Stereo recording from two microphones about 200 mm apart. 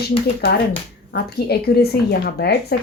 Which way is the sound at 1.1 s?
55° left (ahead or behind).